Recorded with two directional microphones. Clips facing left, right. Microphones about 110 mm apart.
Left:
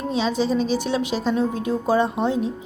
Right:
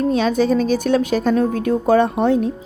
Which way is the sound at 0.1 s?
50° right (ahead or behind).